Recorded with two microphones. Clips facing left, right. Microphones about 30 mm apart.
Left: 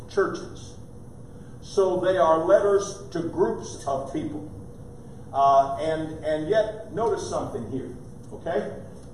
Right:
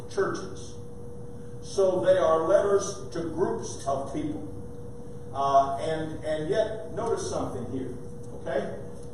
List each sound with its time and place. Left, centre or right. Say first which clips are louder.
0.2 s speech: left 4 dB; centre
1.8 s a man's voice: left 1 dB; centre